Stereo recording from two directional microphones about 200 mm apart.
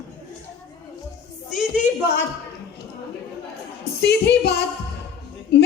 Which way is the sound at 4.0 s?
55° left (ahead or behind).